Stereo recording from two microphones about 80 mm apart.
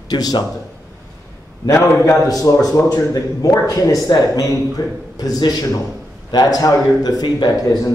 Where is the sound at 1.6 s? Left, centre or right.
Left.